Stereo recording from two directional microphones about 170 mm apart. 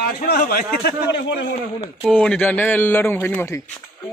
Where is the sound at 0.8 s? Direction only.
75° left (ahead or behind).